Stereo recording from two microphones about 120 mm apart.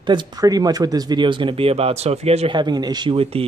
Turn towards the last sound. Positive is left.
turn(degrees=-50)  # may be behind; listen again after turning